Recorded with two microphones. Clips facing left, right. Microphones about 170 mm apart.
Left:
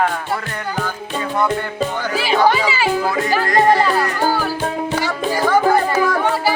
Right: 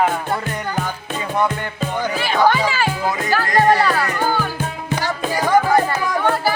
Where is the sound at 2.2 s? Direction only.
10° left (ahead or behind).